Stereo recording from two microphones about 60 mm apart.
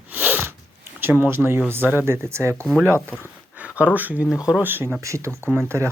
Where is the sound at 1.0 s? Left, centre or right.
Right.